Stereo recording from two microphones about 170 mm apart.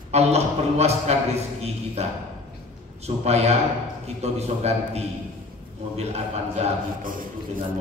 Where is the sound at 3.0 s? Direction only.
40° right (ahead or behind).